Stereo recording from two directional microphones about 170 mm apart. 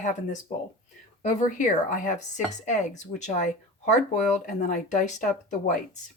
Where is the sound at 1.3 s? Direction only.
45° left (ahead or behind).